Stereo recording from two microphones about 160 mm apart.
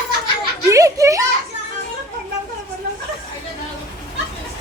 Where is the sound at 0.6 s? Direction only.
20° right (ahead or behind).